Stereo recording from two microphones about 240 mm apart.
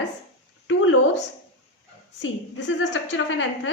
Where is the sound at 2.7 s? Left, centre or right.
Left.